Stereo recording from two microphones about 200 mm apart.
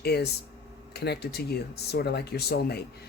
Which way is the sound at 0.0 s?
55° left (ahead or behind).